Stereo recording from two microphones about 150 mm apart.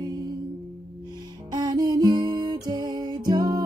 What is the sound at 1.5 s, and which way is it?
Music, 25° right (ahead or behind).